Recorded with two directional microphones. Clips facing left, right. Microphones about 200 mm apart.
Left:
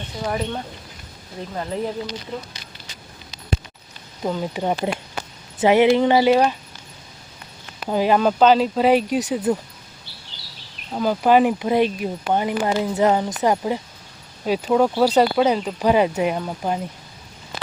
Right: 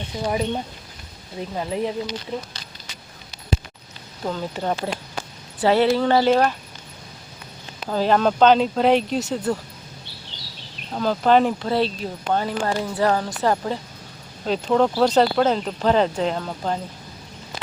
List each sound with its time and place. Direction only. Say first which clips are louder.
0.3 s speech: right 2 dB; 15° right (ahead or behind)
4.2 s speech: left 3 dB; 15° left (ahead or behind)
7.9 s speech: left 1 dB; 10° left (ahead or behind)
10.9 s speech: left 1 dB; 10° left (ahead or behind)